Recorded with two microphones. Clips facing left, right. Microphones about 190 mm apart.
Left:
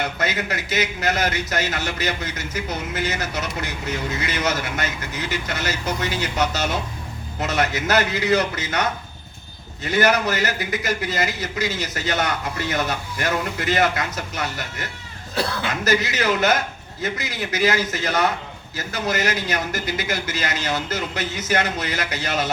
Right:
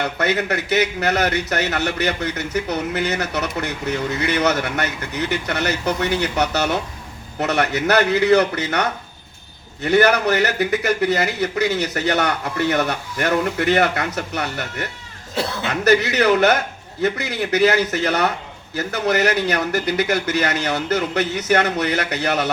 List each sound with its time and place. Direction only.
0.0 s a man's voice: 65° right (ahead or behind)
15.4 s speech: 25° right (ahead or behind)
15.8 s a man's voice: 65° right (ahead or behind)